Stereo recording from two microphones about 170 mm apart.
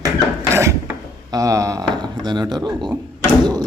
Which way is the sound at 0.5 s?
15° right (ahead or behind).